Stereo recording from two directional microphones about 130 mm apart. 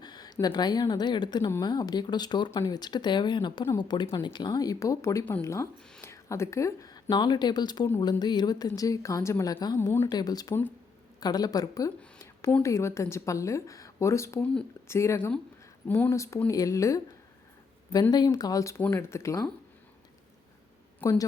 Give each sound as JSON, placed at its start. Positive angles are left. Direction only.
{"t": 0.0, "sound": "a sound", "side_deg": 30}
{"t": 0.4, "sound": "a woman's voice", "side_deg": 30}
{"t": 18.1, "sound": "a woman's voice", "side_deg": 30}
{"t": 21.0, "sound": "a woman's voice", "side_deg": 25}